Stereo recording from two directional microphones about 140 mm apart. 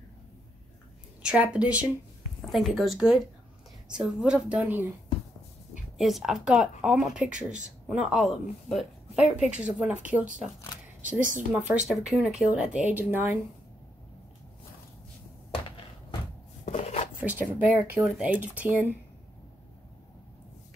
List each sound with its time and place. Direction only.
1.2 s speech: 10° right (ahead or behind)
5.9 s speech: centre (ahead or behind)
16.6 s a sound: 45° left (ahead or behind)
17.2 s speech: 10° right (ahead or behind)